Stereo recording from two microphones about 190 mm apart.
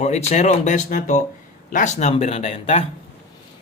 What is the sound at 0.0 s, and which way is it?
A man's voice, 35° left (ahead or behind).